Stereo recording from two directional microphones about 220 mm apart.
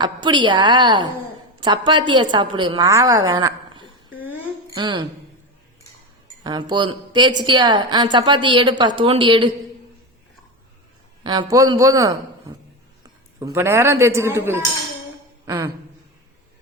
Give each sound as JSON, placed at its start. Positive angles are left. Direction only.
{"t": 0.0, "sound": "a woman's voice", "side_deg": -20}
{"t": 6.4, "sound": "a woman's voice", "side_deg": -20}
{"t": 11.2, "sound": "a man's voice", "side_deg": -20}